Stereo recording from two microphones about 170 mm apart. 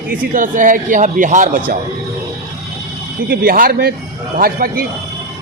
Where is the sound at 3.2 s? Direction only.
60° right (ahead or behind).